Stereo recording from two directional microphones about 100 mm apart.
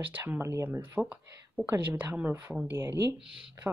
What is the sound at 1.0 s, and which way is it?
Speech, 5° right (ahead or behind).